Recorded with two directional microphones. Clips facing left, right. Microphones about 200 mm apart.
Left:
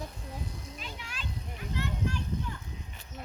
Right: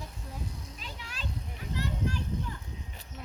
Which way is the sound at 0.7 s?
40° right (ahead or behind).